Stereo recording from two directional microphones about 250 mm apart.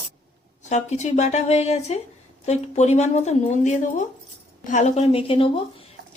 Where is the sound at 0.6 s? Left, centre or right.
Left.